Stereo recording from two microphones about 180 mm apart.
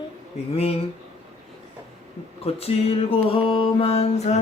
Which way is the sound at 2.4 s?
35° left (ahead or behind).